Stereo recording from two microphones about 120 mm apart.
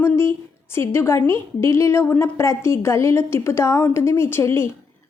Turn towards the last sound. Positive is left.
turn(degrees=20)  # may be behind; listen again after turning